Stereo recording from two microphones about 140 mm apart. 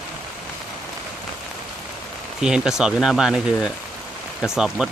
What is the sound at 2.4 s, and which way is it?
Speech, 5° right (ahead or behind).